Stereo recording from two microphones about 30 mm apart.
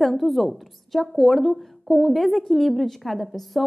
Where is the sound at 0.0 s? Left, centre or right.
Centre.